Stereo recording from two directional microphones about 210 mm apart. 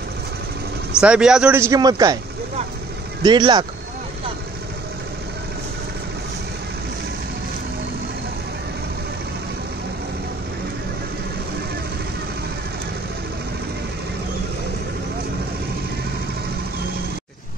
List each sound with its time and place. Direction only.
1.0 s speech: 5° right (ahead or behind)
3.2 s speech: 20° right (ahead or behind)